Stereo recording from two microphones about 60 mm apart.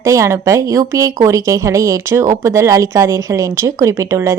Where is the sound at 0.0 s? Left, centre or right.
Right.